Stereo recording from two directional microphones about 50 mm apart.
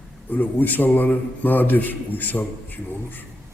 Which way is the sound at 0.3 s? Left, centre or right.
Left.